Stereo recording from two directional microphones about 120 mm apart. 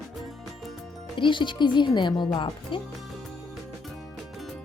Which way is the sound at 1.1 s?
45° left (ahead or behind).